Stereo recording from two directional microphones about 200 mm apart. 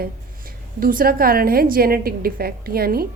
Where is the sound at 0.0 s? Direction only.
45° right (ahead or behind).